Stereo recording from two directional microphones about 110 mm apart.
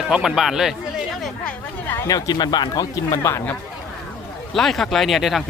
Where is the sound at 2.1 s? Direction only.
35° left (ahead or behind).